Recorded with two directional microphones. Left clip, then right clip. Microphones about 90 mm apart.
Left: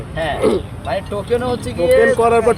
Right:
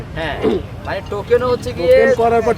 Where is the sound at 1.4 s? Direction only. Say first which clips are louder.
Right 2 dB; 25° right (ahead or behind).